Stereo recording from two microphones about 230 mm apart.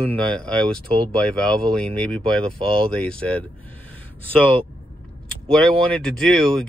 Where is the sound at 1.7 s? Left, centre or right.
Centre.